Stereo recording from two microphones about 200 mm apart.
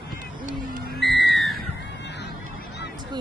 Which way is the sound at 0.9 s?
Centre (ahead or behind).